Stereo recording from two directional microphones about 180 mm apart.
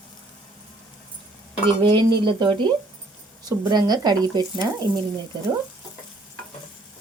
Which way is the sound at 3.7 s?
20° right (ahead or behind).